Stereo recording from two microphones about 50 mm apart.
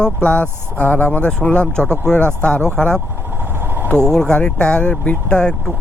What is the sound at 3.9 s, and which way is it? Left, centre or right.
Speech, right.